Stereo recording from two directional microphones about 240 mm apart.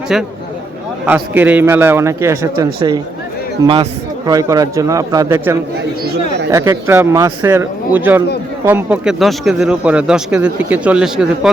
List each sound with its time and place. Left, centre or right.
0.1 s a man's voice: centre